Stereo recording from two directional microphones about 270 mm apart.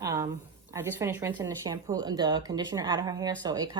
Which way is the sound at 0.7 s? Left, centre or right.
Centre.